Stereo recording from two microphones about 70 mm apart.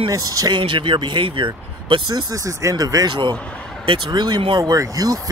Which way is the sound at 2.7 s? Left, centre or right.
Right.